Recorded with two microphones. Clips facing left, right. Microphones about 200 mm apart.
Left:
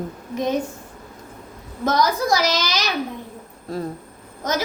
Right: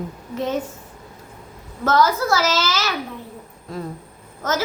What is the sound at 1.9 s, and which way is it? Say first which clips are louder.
A woman's voice: right 1 dB; 15° left (ahead or behind).